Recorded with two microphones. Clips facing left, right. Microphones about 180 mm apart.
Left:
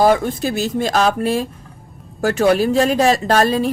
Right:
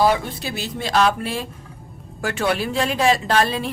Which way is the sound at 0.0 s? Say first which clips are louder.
Left 5 dB; 45° left (ahead or behind).